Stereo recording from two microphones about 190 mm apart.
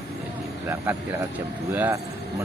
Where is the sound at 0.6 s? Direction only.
10° right (ahead or behind).